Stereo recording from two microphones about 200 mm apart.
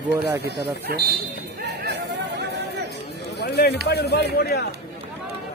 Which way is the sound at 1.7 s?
55° right (ahead or behind).